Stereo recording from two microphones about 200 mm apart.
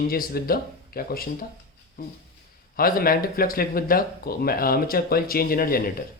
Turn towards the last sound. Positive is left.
turn(degrees=45)  # may be behind; listen again after turning